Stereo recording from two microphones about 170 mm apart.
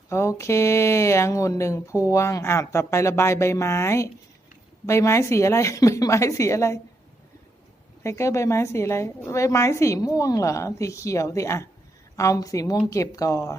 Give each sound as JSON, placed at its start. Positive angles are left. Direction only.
{"t": 0.1, "sound": "a woman's voice", "side_deg": 15}
{"t": 8.0, "sound": "a woman's voice", "side_deg": 15}